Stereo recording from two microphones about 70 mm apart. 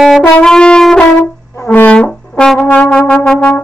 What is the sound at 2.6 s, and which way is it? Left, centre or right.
Music, left.